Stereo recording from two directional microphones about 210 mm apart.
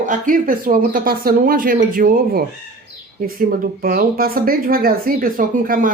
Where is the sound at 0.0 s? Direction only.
40° right (ahead or behind).